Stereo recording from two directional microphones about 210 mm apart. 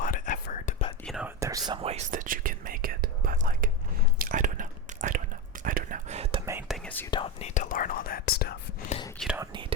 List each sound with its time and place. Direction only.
0.0 s whispering: 40° left (ahead or behind)
1.0 s whispering: centre (ahead or behind)
1.4 s whispering: 15° right (ahead or behind); by 6.4 s 30° right (ahead or behind)
6.4 s whispering: 15° right (ahead or behind)
6.7 s whispering: 5° left (ahead or behind)
7.1 s whispering: 25° left (ahead or behind); by 8.5 s 50° left (ahead or behind)
9.1 s whispering: centre (ahead or behind)
9.4 s whispering: 20° right (ahead or behind)